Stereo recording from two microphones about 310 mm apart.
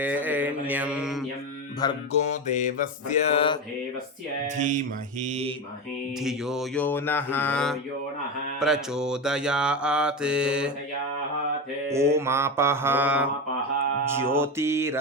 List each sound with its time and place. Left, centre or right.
0.0 s mantra: centre
1.8 s mantra: centre
4.4 s speech: right
6.2 s mantra: centre
11.9 s mantra: centre
14.3 s mantra: centre